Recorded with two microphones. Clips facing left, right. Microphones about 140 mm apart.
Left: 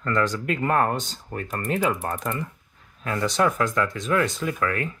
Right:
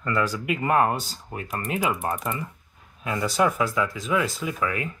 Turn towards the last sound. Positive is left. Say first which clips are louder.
# left 2 dB
turn(degrees=-5)  # may be behind; listen again after turning